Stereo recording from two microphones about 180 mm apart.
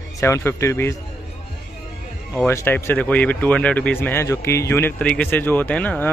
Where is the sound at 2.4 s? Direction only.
10° left (ahead or behind).